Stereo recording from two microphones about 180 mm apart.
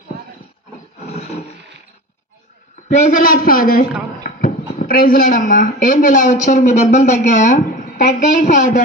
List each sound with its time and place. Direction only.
2.9 s a man's voice: 45° left (ahead or behind)